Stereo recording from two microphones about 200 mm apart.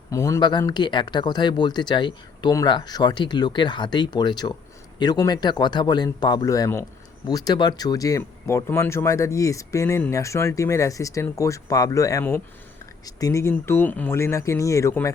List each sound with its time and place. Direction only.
0.1 s speech: 15° left (ahead or behind)